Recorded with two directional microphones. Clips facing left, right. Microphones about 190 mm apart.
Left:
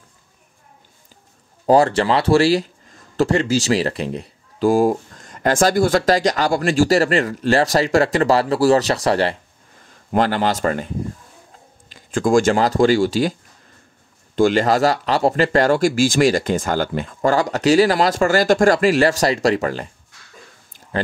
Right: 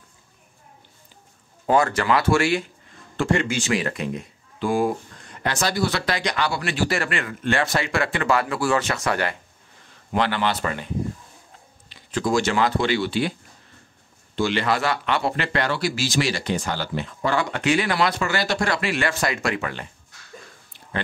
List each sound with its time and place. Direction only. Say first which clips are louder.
1.7 s speech: left 5 dB; 30° left (ahead or behind)
11.9 s speech: left 6 dB; 50° left (ahead or behind)
14.3 s speech: left 7 dB; 45° left (ahead or behind)